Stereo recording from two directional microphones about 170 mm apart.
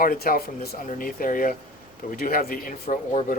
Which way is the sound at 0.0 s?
60° left (ahead or behind).